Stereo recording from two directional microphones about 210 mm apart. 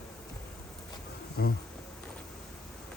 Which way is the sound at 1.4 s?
55° left (ahead or behind).